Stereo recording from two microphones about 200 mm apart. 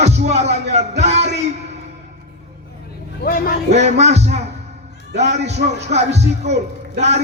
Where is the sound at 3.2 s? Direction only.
45° left (ahead or behind).